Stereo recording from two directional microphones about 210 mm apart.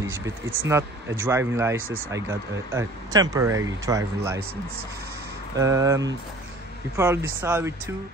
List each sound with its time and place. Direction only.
0.0 s speech: 10° right (ahead or behind)
5.6 s speech: 15° right (ahead or behind)